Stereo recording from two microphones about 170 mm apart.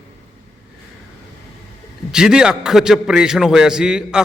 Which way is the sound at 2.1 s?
5° right (ahead or behind).